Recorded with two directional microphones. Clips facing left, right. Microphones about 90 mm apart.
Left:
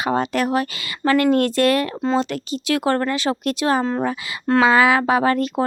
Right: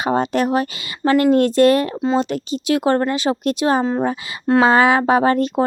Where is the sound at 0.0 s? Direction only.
25° right (ahead or behind).